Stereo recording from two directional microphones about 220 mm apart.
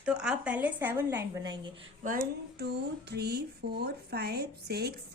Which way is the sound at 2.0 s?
40° right (ahead or behind).